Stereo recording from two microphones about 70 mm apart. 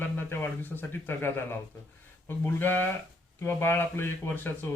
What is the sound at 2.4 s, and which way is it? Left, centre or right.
Speech, left.